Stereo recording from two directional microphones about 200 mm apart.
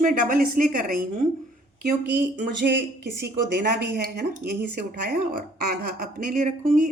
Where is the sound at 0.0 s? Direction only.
40° right (ahead or behind).